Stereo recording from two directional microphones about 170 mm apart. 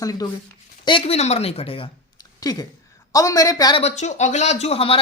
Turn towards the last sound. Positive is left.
turn(degrees=35)  # may be behind; listen again after turning